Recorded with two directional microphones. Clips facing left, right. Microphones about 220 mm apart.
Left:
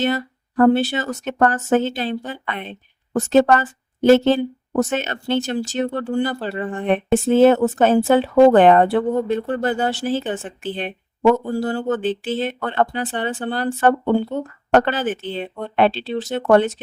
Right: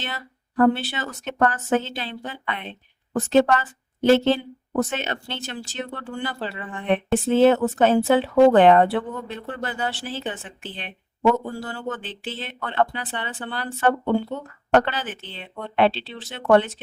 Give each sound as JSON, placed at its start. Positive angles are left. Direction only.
{"t": 0.0, "sound": "speech", "side_deg": 45}